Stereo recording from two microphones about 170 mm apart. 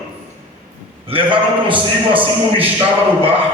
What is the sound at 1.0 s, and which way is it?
Speech, 30° right (ahead or behind).